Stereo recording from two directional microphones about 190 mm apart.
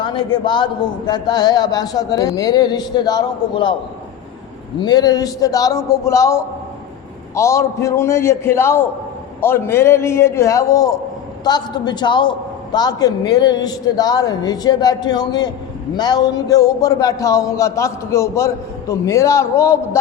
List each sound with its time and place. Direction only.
0.0 s a man's voice: 25° left (ahead or behind)
4.8 s a man's voice: 20° left (ahead or behind)